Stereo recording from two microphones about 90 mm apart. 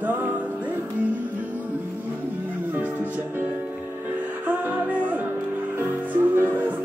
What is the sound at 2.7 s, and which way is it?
Music, 20° right (ahead or behind).